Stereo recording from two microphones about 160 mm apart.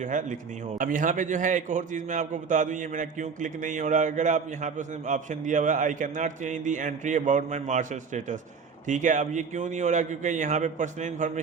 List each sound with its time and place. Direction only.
0.0 s a man's voice: 50° right (ahead or behind)